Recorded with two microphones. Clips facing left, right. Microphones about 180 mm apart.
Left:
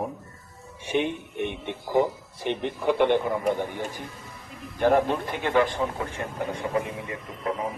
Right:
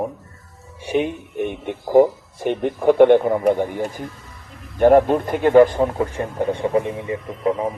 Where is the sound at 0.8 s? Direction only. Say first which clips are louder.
Right 5 dB; 35° right (ahead or behind).